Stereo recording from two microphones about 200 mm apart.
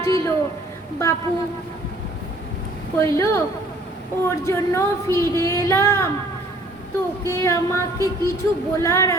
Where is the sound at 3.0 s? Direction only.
15° left (ahead or behind).